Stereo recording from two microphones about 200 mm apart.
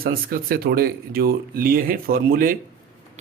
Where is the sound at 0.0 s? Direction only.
50° right (ahead or behind).